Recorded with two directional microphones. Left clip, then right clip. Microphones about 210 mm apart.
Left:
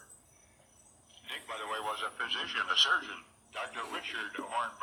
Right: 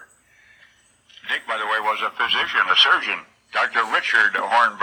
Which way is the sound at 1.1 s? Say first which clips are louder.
Right 16 dB; 50° right (ahead or behind).